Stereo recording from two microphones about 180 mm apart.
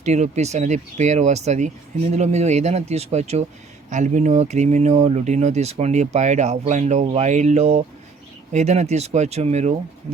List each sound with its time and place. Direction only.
0.0 s speech: 40° right (ahead or behind)